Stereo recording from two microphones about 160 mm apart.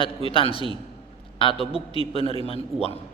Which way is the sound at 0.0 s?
35° left (ahead or behind).